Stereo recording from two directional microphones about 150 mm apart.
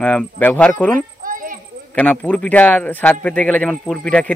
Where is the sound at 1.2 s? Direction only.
65° right (ahead or behind).